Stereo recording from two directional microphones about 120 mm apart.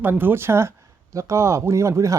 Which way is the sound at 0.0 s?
15° right (ahead or behind).